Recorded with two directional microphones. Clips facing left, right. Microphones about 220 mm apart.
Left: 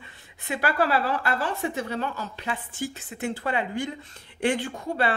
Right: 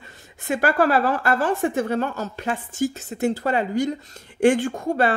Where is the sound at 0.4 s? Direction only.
45° right (ahead or behind).